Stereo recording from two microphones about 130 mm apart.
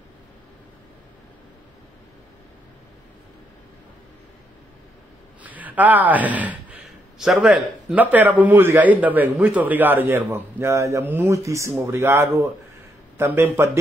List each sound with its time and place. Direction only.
5.4 s speech: 10° right (ahead or behind)